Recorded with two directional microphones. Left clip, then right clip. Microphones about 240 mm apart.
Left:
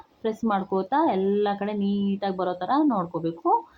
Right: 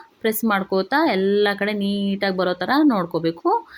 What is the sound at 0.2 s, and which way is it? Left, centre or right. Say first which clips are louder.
Speech: right 5 dB; right.